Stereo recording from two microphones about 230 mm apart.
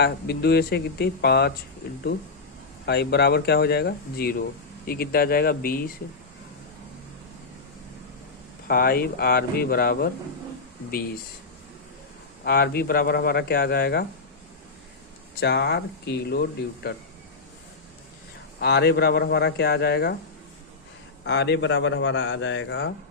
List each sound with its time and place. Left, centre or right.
0.0 s a man's voice: left
2.8 s a man's voice: left
8.6 s speech: left
12.5 s a man's voice: left
15.4 s a man's voice: left
18.6 s a man's voice: left
21.2 s a man's voice: left